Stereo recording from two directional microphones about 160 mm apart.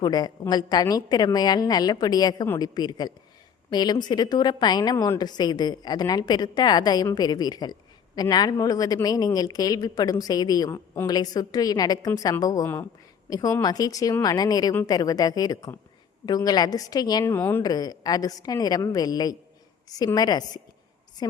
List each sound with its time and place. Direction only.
0.0 s a woman's voice: 25° left (ahead or behind)
17.3 s a woman's voice: 15° left (ahead or behind)
17.6 s a woman's voice: 25° left (ahead or behind)